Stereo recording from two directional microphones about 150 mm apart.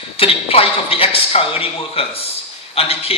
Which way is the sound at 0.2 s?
40° left (ahead or behind).